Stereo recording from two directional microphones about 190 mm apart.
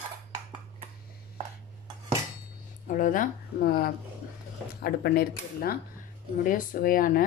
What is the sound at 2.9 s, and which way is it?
A woman's voice, 45° left (ahead or behind).